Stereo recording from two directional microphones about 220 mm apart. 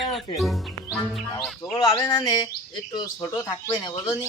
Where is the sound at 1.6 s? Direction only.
15° left (ahead or behind).